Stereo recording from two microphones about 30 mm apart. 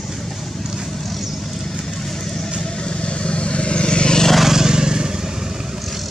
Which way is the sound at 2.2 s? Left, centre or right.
Centre.